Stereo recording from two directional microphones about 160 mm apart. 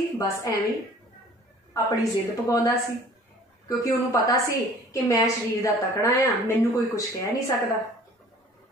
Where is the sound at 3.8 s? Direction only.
20° left (ahead or behind).